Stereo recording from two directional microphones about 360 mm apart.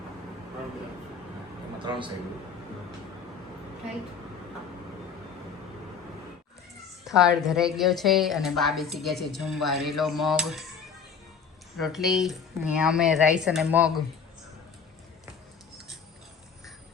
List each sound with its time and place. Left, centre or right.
1.8 s a man's voice: centre
7.0 s a sound: centre
7.4 s speech: centre
11.8 s speech: centre